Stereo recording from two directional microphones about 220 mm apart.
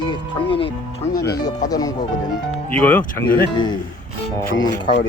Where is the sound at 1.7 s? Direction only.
15° left (ahead or behind).